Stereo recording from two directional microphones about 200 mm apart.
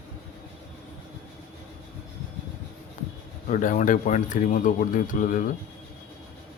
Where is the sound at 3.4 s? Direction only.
40° left (ahead or behind).